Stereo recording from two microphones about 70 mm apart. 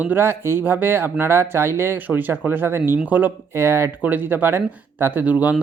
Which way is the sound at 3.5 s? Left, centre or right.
Right.